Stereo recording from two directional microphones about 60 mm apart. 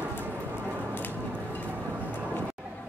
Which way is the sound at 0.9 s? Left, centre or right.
Left.